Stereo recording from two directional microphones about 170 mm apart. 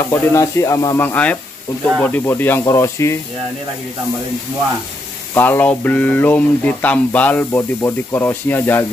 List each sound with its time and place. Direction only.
0.1 s speech: 15° left (ahead or behind)
5.3 s speech: 10° left (ahead or behind)